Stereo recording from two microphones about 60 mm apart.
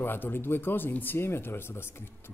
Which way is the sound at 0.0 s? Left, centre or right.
Left.